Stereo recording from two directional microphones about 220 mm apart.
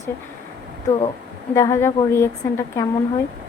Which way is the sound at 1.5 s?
15° left (ahead or behind).